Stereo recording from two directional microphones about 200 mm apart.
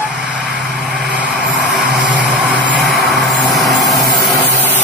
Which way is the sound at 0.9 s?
5° right (ahead or behind).